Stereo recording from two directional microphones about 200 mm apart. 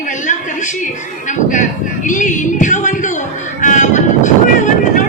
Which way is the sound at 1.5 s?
40° left (ahead or behind).